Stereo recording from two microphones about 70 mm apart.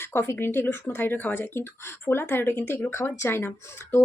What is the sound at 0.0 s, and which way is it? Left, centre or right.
Speech, left.